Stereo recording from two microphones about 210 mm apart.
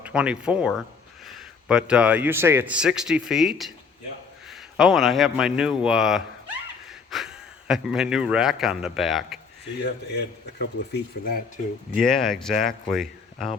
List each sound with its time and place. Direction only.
0.0 s speech: 5° right (ahead or behind)
10.2 s speech: 50° left (ahead or behind)
11.9 s speech: centre (ahead or behind)